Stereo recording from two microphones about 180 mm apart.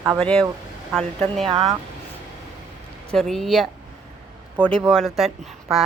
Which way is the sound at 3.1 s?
Centre (ahead or behind).